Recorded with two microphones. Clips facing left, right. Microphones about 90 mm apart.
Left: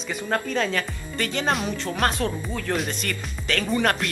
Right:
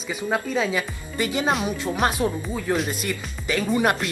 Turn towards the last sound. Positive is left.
turn(degrees=-10)  # may be behind; listen again after turning